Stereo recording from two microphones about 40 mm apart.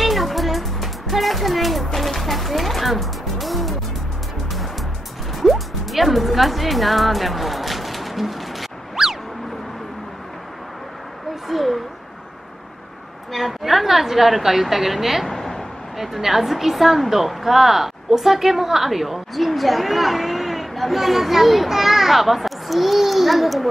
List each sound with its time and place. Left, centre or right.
0.0 s music: centre
5.4 s music: centre
11.4 s a sound: centre
13.3 s a woman's voice: centre
15.2 s a sound: centre
16.0 s a woman's voice: centre